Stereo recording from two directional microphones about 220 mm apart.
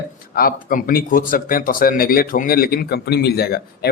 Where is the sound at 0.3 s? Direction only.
40° left (ahead or behind).